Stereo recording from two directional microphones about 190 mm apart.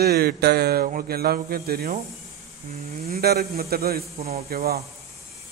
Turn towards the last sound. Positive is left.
turn(degrees=-50)  # may be behind; listen again after turning